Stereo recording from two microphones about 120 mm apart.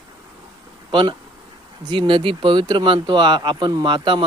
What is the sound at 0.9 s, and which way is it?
Speech, 45° right (ahead or behind).